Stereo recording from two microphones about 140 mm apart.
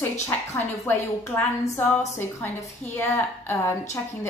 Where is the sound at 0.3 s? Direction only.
15° left (ahead or behind).